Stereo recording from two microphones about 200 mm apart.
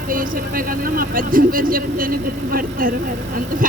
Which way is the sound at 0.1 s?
45° right (ahead or behind).